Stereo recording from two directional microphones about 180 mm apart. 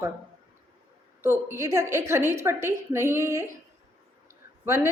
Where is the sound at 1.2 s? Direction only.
15° right (ahead or behind).